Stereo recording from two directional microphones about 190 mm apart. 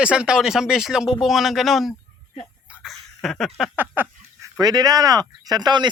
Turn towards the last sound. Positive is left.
turn(degrees=-20)  # may be behind; listen again after turning